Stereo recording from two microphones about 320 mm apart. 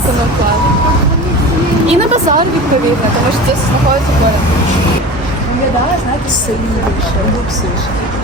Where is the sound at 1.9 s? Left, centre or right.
Centre.